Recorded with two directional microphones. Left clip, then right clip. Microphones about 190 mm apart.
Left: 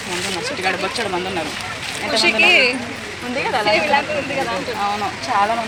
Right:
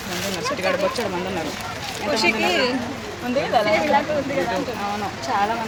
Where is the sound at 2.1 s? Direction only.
15° right (ahead or behind).